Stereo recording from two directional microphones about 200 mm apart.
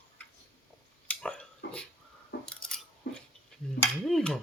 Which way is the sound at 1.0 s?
5° left (ahead or behind).